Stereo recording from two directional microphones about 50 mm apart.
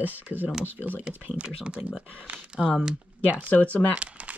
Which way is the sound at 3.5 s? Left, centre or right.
Left.